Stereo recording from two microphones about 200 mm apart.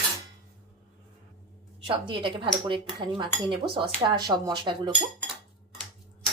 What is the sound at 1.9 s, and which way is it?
Speech, 25° right (ahead or behind).